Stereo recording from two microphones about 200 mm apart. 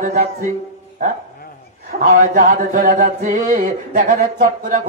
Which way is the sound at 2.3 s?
40° right (ahead or behind).